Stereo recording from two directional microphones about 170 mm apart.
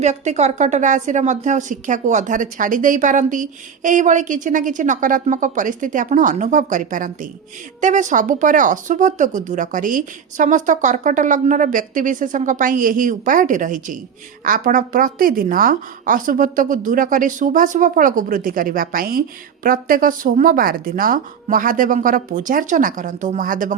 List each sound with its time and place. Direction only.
0.0 s a woman's voice: 40° right (ahead or behind)